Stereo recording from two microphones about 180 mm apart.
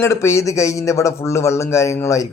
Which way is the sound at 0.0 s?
15° left (ahead or behind).